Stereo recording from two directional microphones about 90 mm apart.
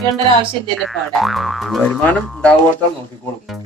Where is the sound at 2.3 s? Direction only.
10° left (ahead or behind).